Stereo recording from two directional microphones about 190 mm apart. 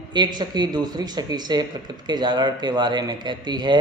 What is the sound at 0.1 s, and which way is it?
Speech, 25° right (ahead or behind).